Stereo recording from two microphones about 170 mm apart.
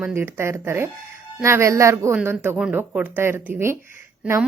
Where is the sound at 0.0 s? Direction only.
10° right (ahead or behind).